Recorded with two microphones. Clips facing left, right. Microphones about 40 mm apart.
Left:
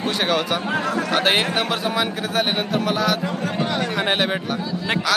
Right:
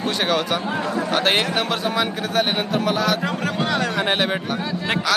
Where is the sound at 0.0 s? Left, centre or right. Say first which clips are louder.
Even; centre.